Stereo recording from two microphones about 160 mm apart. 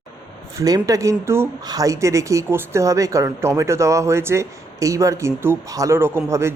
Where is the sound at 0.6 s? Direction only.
20° right (ahead or behind).